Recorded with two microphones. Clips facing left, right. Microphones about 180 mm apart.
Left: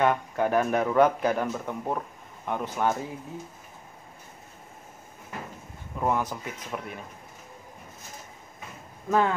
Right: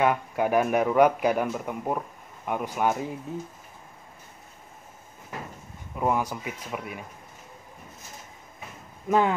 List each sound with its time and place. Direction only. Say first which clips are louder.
0.0 s speech: even; 10° right (ahead or behind)
5.9 s speech: right 1 dB; 10° right (ahead or behind)
9.1 s speech: right 1 dB; 15° right (ahead or behind)